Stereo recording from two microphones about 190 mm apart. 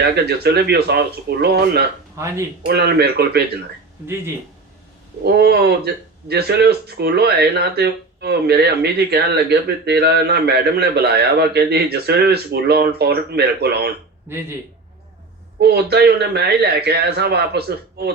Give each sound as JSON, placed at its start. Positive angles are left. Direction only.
{"t": 0.3, "sound": "speech", "side_deg": -60}
{"t": 2.2, "sound": "speech", "side_deg": -15}
{"t": 2.6, "sound": "speech", "side_deg": -60}
{"t": 5.2, "sound": "speech", "side_deg": -55}
{"t": 15.6, "sound": "speech", "side_deg": -60}